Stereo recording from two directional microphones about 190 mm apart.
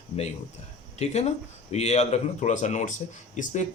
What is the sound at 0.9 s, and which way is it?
Speech, 35° left (ahead or behind).